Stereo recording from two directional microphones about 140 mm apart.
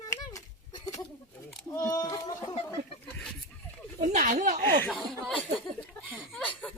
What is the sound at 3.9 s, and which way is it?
Speech, 60° right (ahead or behind).